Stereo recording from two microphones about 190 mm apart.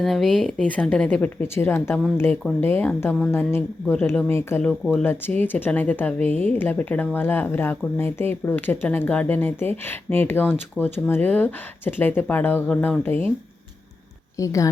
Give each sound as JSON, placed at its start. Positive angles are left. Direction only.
{"t": 0.0, "sound": "speech", "side_deg": 0}
{"t": 14.3, "sound": "speech", "side_deg": 15}